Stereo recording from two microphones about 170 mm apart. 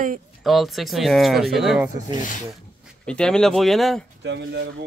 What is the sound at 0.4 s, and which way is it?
Speech, centre (ahead or behind).